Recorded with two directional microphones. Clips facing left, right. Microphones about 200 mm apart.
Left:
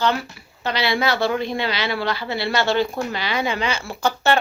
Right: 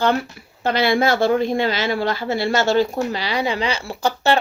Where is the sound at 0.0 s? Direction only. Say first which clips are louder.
Right 3 dB; 50° right (ahead or behind).